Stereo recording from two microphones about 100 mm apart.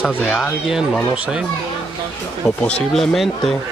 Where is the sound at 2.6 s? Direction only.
5° left (ahead or behind).